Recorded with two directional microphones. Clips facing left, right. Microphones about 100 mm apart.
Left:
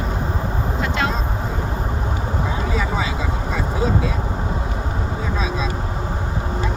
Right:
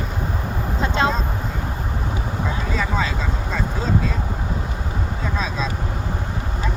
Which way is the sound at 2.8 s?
10° left (ahead or behind).